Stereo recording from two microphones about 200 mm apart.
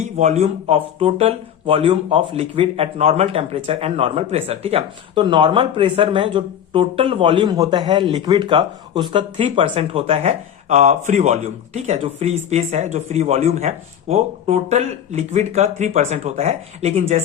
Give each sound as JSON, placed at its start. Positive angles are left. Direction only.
{"t": 0.2, "sound": "speech", "side_deg": -35}